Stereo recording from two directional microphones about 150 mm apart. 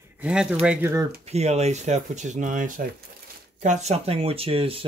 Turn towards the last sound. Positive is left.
turn(degrees=-40)  # may be behind; listen again after turning